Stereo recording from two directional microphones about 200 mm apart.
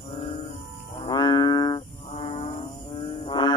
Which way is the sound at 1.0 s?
20° left (ahead or behind).